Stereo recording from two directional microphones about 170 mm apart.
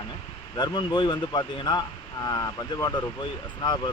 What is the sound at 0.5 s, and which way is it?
Speech, 25° left (ahead or behind).